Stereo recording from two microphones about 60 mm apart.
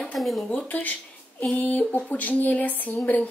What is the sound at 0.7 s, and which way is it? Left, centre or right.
Speech, left.